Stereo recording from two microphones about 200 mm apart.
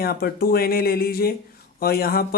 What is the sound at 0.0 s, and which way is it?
Speech, 50° left (ahead or behind).